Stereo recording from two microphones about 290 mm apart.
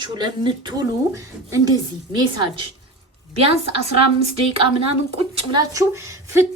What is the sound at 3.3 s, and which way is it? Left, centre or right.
A woman's voice, centre.